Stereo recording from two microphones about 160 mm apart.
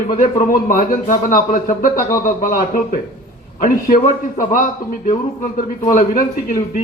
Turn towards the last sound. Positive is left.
turn(degrees=60)  # may be behind; listen again after turning